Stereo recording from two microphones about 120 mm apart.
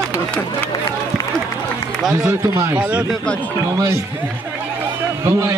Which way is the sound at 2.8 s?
10° right (ahead or behind).